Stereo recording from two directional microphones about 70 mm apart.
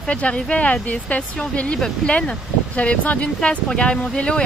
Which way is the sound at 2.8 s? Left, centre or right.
Centre.